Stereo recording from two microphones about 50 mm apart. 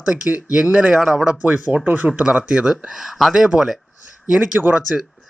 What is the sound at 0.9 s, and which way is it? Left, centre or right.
Speech, centre.